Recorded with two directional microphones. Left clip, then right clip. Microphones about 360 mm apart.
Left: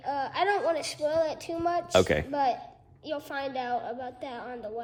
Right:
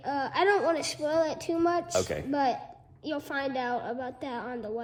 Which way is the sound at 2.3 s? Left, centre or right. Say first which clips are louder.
Even; centre.